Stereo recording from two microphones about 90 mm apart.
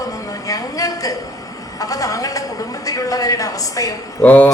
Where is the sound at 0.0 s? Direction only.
40° left (ahead or behind).